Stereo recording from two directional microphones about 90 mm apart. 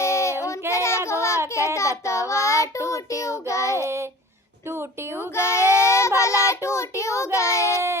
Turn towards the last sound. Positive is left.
turn(degrees=35)  # may be behind; listen again after turning